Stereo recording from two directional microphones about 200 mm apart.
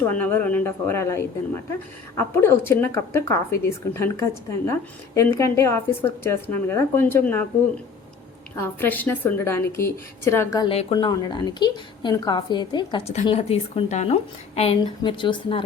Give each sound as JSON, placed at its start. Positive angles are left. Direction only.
{"t": 0.0, "sound": "a woman's voice", "side_deg": 10}
{"t": 8.5, "sound": "a woman's voice", "side_deg": 10}
{"t": 10.7, "sound": "a woman's voice", "side_deg": 30}